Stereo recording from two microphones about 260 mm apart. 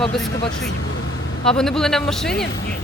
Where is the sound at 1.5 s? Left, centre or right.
Centre.